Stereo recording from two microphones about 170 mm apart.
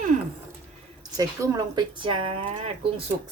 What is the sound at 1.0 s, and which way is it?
Speech, 20° right (ahead or behind).